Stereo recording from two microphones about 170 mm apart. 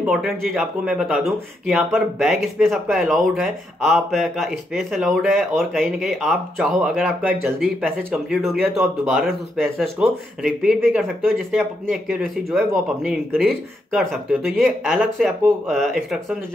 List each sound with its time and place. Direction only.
0.0 s speech: centre (ahead or behind)